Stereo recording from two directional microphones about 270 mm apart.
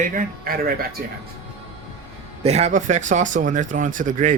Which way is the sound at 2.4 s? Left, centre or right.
Right.